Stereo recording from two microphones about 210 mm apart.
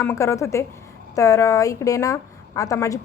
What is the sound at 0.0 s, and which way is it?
A woman's voice, 10° left (ahead or behind).